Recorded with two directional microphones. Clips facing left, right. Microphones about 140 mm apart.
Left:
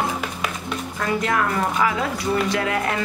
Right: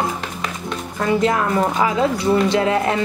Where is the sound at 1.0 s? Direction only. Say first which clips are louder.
Right 5 dB; 25° right (ahead or behind).